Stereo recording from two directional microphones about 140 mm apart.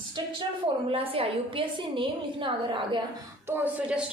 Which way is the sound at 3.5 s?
10° right (ahead or behind).